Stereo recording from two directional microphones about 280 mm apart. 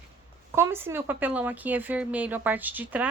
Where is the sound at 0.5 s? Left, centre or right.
Centre.